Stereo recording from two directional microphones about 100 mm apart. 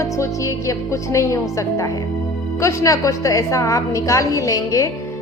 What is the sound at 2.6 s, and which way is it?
A woman's voice, 35° left (ahead or behind).